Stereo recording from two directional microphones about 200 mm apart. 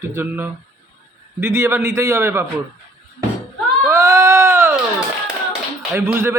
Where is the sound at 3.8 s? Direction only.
15° right (ahead or behind).